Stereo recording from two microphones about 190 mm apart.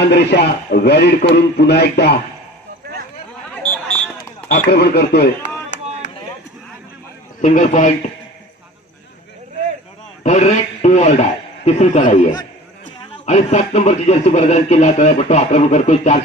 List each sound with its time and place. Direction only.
0.1 s a man's voice: 60° left (ahead or behind)
3.6 s a sound: 5° left (ahead or behind)
4.6 s a man's voice: 60° left (ahead or behind)
7.4 s a man's voice: 40° left (ahead or behind)
10.2 s a man's voice: 35° left (ahead or behind)